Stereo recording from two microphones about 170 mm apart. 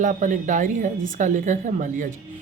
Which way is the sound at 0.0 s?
50° right (ahead or behind).